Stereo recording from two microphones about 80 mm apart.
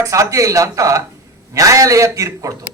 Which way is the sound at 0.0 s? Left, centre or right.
Right.